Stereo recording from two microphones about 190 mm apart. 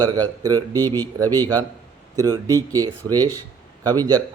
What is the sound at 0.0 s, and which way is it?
Speech, 20° right (ahead or behind).